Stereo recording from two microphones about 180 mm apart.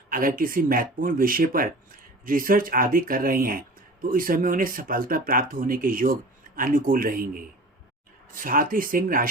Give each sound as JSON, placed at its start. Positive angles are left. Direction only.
{"t": 0.1, "sound": "speech", "side_deg": -50}